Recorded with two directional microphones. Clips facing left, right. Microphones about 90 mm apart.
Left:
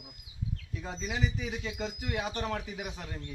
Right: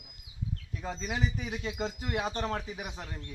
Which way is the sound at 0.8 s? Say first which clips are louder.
Right 1 dB; 40° right (ahead or behind).